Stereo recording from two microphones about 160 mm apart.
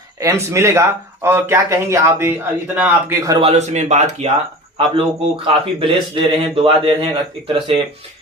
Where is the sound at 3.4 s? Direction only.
40° right (ahead or behind).